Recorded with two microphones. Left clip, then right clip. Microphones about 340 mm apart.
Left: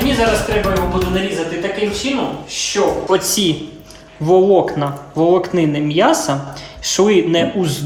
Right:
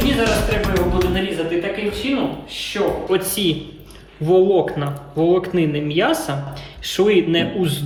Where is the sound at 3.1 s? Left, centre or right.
Centre.